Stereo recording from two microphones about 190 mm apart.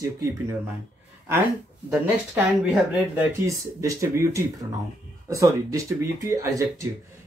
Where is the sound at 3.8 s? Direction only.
15° right (ahead or behind).